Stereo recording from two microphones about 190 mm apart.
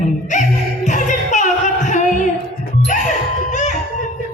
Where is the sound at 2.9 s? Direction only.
40° left (ahead or behind).